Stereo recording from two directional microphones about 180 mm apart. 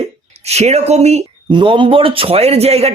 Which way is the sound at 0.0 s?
35° right (ahead or behind).